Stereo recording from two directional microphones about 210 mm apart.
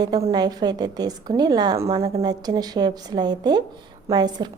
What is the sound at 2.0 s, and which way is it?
A woman's voice, 30° right (ahead or behind).